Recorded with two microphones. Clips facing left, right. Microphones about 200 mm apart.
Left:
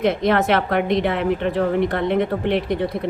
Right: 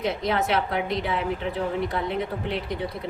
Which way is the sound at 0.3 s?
80° left.